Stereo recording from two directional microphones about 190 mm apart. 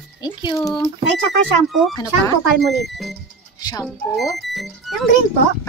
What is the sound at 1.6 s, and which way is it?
Speech, centre (ahead or behind).